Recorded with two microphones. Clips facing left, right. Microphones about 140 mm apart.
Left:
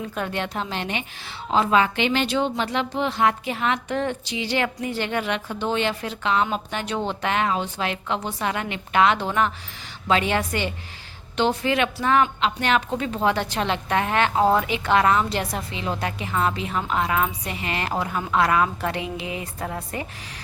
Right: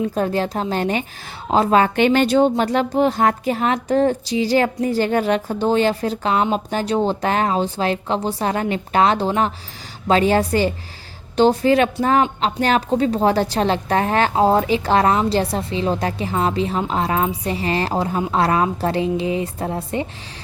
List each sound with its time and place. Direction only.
0.1 s speech: 35° right (ahead or behind)